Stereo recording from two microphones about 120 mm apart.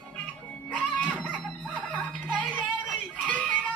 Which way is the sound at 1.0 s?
10° left (ahead or behind).